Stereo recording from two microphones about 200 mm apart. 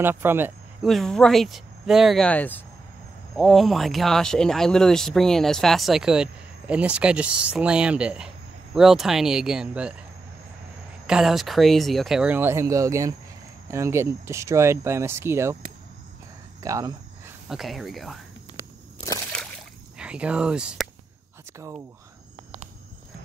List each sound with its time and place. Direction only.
0.0 s speech: 10° right (ahead or behind)
0.8 s speech: centre (ahead or behind)
11.1 s speech: centre (ahead or behind)
17.5 s speech: centre (ahead or behind)
20.0 s speech: 5° right (ahead or behind)
21.5 s speech: 15° right (ahead or behind)